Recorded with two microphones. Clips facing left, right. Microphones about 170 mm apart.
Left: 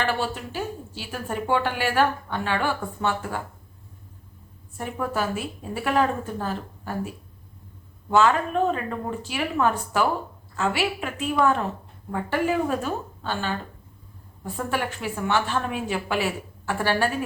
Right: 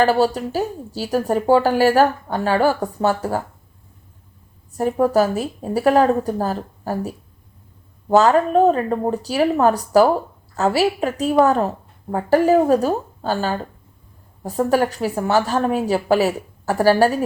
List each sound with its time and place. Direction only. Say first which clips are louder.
0.0 s a woman's voice: right 10 dB; 40° right (ahead or behind)
4.7 s a woman's voice: right 11 dB; 40° right (ahead or behind)